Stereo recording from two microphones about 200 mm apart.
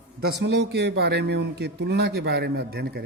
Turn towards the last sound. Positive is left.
turn(degrees=-55)  # may be behind; listen again after turning